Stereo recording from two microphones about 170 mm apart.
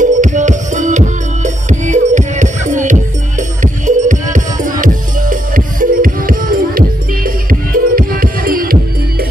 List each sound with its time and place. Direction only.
0.0 s music: 45° right (ahead or behind)